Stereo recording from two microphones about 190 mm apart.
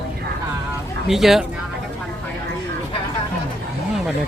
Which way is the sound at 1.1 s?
Centre (ahead or behind).